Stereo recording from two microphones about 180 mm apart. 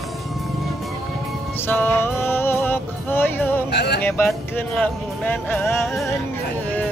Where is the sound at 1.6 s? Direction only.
10° left (ahead or behind).